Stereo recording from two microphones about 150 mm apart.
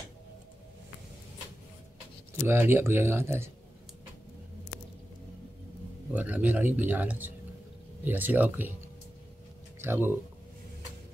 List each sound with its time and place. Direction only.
2.4 s speech: 15° right (ahead or behind)
6.1 s speech: 10° right (ahead or behind)
9.8 s speech: 15° right (ahead or behind)